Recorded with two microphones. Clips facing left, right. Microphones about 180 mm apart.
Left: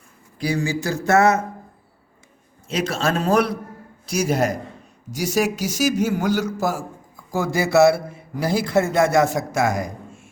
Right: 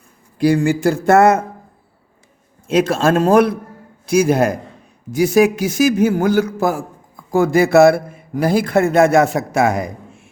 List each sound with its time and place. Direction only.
0.4 s a man's voice: 55° right (ahead or behind)
2.6 s a man's voice: 55° right (ahead or behind)